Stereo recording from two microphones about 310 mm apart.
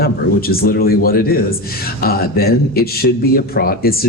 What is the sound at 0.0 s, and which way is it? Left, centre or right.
Speech, left.